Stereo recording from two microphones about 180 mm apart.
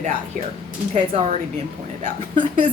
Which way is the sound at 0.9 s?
40° right (ahead or behind).